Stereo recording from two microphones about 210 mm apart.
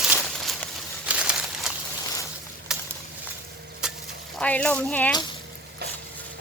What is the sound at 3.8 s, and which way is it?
Stir, 5° right (ahead or behind).